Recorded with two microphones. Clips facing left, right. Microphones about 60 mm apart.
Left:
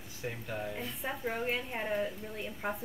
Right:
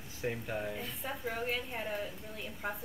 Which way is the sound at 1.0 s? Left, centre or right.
Centre.